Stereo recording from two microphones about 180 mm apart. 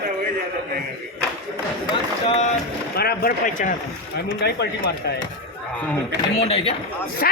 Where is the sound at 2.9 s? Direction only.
60° left (ahead or behind).